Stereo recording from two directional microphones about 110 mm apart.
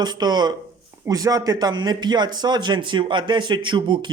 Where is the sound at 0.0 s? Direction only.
40° right (ahead or behind).